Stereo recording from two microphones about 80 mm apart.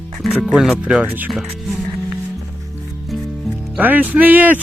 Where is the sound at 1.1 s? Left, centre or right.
Right.